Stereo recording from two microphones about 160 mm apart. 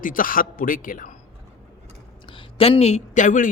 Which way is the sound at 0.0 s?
60° left (ahead or behind).